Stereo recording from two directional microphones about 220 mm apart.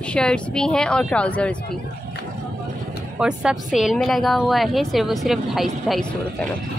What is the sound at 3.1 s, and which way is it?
A woman's voice, 5° right (ahead or behind).